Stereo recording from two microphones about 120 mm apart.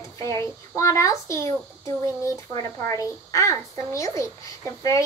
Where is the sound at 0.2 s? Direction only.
25° left (ahead or behind).